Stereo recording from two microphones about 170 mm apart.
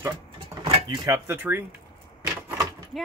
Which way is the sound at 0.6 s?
25° right (ahead or behind).